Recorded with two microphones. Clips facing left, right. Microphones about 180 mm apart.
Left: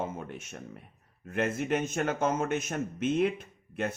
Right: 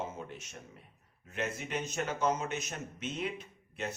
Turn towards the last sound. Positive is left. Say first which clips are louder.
# left 6 dB
turn(degrees=55)  # may be behind; listen again after turning